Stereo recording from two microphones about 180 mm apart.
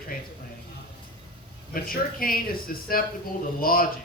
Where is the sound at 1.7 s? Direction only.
55° left (ahead or behind).